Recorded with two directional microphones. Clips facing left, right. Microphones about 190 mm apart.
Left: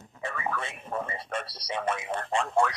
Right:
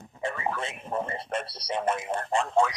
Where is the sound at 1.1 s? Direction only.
55° right (ahead or behind).